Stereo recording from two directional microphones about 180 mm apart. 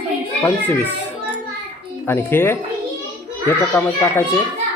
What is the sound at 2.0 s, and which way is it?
Speech, 10° left (ahead or behind).